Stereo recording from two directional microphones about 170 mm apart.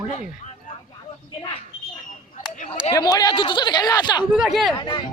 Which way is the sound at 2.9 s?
20° left (ahead or behind).